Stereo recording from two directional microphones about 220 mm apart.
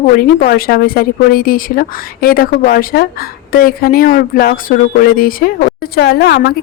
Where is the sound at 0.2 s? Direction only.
40° left (ahead or behind).